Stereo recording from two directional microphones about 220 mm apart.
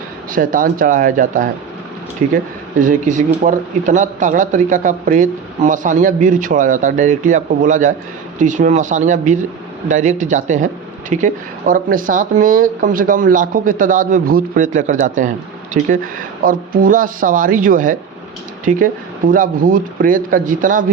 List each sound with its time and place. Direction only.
0.3 s speech: 40° right (ahead or behind)
2.8 s speech: 35° right (ahead or behind)
19.3 s speech: 40° right (ahead or behind)